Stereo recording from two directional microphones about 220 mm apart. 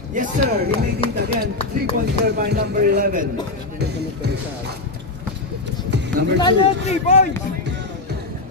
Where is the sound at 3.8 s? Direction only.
50° right (ahead or behind).